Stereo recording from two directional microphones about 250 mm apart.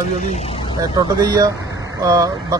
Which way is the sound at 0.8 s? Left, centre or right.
Centre.